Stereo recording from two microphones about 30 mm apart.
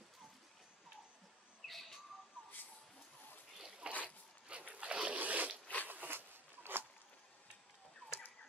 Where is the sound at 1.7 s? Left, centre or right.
Centre.